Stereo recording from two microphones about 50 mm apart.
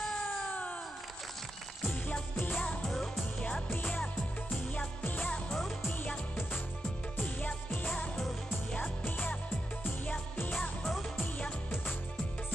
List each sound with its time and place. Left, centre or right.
2.4 s music: left
3.8 s music: left
5.5 s music: centre
7.2 s music of asia: left
9.0 s music: left
10.8 s music: centre